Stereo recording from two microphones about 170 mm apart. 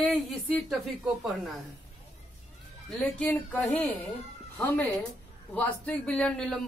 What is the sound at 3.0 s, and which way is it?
Speech, 5° left (ahead or behind).